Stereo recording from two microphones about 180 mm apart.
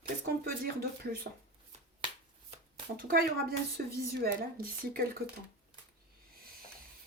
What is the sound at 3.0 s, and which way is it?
Speech, 55° right (ahead or behind).